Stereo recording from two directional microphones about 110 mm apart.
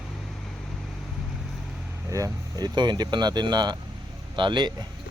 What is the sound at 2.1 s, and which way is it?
Speech, 30° right (ahead or behind).